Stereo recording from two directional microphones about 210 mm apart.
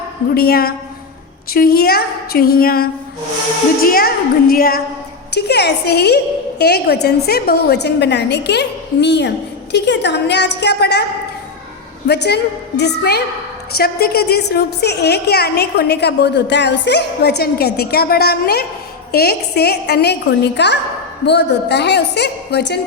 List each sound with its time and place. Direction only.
0.3 s a woman's voice: 45° left (ahead or behind)
12.0 s a woman's voice: 50° left (ahead or behind)